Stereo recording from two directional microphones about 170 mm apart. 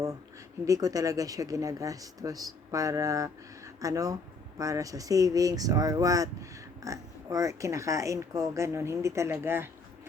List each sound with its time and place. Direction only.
0.6 s speech: 20° right (ahead or behind)